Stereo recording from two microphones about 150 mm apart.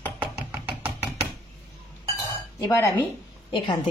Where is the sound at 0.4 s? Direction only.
10° right (ahead or behind).